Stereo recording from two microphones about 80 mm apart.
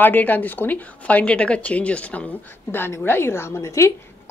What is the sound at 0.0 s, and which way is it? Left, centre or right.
Speech, left.